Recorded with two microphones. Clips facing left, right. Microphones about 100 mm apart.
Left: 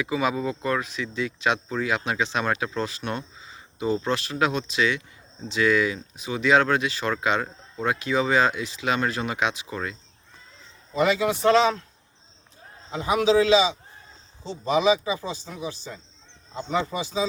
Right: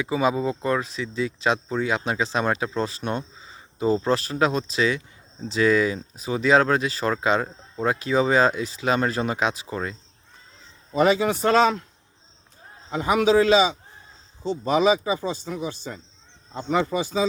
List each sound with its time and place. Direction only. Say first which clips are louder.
0.0 s speech: right 2 dB; 30° right (ahead or behind)
11.0 s speech: right 1 dB; 45° right (ahead or behind)
12.9 s speech: right 2 dB; 50° right (ahead or behind)